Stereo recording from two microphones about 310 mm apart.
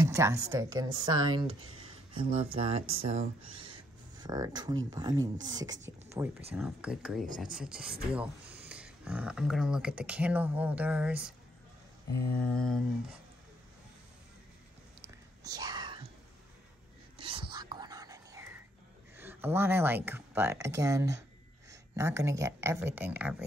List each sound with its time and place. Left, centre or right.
0.0 s speech: centre
1.4 s a sound: centre
2.5 s speech: centre
7.2 s speech: right
7.5 s speech: centre
12.4 s speech: centre
15.4 s whispering: centre
17.2 s whispering: centre
19.1 s speech: centre